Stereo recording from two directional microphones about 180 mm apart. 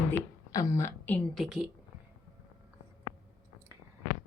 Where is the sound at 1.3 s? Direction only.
Centre (ahead or behind).